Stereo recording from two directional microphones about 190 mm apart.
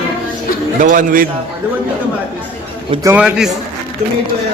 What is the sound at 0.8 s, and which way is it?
Speech, 45° right (ahead or behind).